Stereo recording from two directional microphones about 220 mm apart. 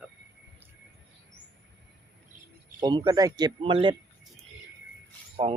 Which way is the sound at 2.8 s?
20° right (ahead or behind).